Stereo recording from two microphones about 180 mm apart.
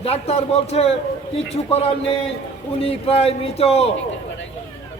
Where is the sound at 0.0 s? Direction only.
35° left (ahead or behind).